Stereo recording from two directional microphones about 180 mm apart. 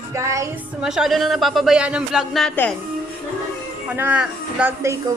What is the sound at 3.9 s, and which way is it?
Speech, 10° right (ahead or behind).